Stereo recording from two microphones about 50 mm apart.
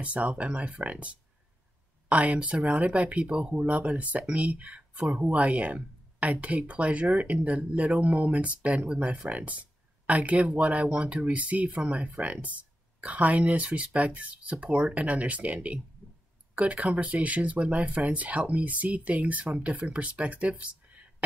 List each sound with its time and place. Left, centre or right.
0.0 s speech: right